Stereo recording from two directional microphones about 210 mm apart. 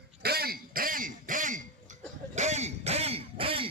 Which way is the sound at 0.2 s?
50° right (ahead or behind).